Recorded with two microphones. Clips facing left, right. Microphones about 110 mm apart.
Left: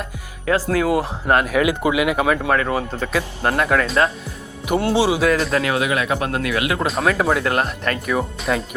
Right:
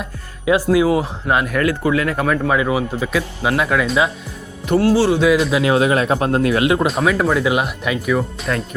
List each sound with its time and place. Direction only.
0.4 s speech: 15° right (ahead or behind)
0.9 s speech: centre (ahead or behind)
1.6 s speech: 15° left (ahead or behind)
2.6 s speech: 10° right (ahead or behind)
4.8 s a man's voice: 25° left (ahead or behind)
5.0 s speech: 5° left (ahead or behind)
5.3 s speech: 5° right (ahead or behind)
5.6 s speech: 30° right (ahead or behind)
6.8 s speech: centre (ahead or behind)